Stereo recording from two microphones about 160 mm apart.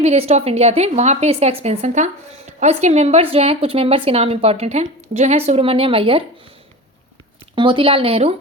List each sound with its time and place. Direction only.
0.0 s a woman's voice: 40° right (ahead or behind)
7.5 s a woman's voice: 30° right (ahead or behind)